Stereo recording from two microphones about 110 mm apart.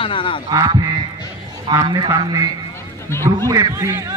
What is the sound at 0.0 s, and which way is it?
Speech, 50° left (ahead or behind).